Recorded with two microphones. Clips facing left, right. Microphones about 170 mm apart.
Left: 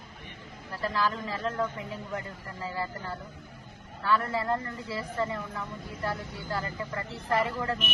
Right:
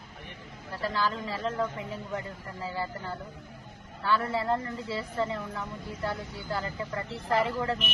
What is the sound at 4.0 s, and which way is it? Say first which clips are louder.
Speech: even; 30° right (ahead or behind).